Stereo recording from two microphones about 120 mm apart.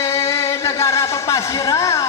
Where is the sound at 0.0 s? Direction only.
25° left (ahead or behind).